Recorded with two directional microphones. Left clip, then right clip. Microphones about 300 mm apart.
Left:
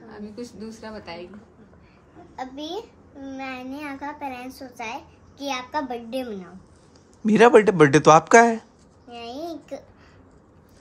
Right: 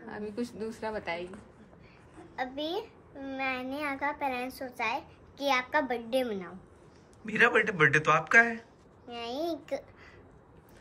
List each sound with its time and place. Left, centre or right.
0.4 s a woman's voice: right
2.3 s a child's voice: centre
9.1 s a sound: centre